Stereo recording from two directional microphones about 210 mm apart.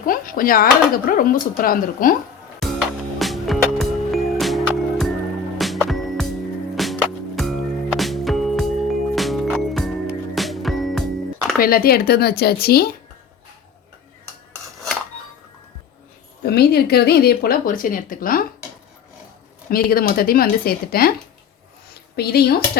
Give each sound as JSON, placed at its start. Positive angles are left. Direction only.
{"t": 0.0, "sound": "speech", "side_deg": 40}
{"t": 2.6, "sound": "music", "side_deg": 0}
{"t": 11.6, "sound": "a woman's voice", "side_deg": 45}
{"t": 16.4, "sound": "a woman's voice", "side_deg": 50}
{"t": 19.7, "sound": "a woman's voice", "side_deg": 45}
{"t": 22.1, "sound": "a woman's voice", "side_deg": 50}